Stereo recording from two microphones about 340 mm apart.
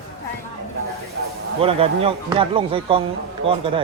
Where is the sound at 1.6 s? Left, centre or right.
Centre.